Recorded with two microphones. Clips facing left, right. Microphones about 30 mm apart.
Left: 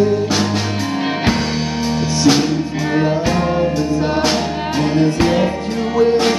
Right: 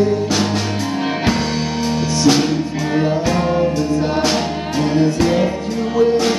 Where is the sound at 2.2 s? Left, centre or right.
Centre.